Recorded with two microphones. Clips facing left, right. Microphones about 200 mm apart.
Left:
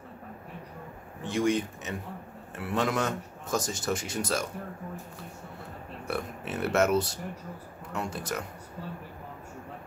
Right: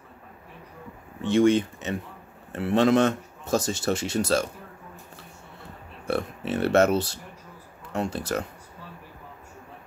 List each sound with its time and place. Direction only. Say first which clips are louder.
1.2 s speech: right 7 dB; 25° right (ahead or behind)
6.0 s speech: right 6 dB; 30° right (ahead or behind)